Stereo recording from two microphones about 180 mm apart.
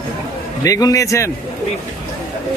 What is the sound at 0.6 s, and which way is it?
Speech, 20° left (ahead or behind).